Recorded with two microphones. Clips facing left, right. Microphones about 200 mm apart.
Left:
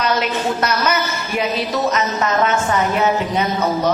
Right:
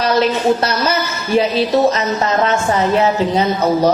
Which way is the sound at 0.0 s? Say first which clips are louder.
Right 5 dB; 35° right (ahead or behind).